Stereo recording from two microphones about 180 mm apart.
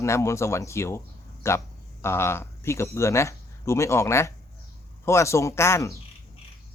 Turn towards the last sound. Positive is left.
turn(degrees=15)  # may be behind; listen again after turning